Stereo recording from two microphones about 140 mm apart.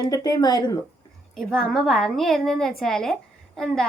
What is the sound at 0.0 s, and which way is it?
Speech, 25° left (ahead or behind).